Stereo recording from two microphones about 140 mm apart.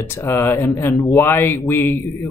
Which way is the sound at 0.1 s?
15° left (ahead or behind).